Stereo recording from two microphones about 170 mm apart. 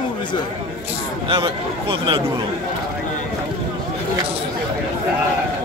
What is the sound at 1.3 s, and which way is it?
Speech, 30° right (ahead or behind).